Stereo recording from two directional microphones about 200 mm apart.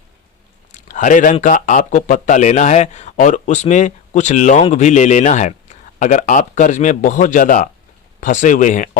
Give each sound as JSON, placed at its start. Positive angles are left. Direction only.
{"t": 0.7, "sound": "speech", "side_deg": 40}